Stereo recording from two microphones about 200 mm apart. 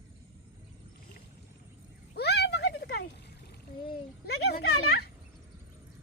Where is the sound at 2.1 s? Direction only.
55° left (ahead or behind).